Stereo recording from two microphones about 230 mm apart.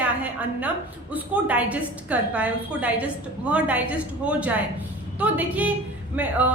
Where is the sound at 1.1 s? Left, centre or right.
Centre.